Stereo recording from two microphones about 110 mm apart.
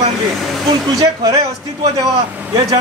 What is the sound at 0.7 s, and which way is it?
Speech, 35° right (ahead or behind).